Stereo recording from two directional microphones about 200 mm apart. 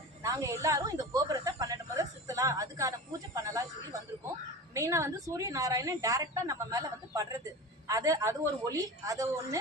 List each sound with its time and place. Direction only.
0.2 s a woman's voice: 15° right (ahead or behind)
4.7 s a woman's voice: 15° right (ahead or behind)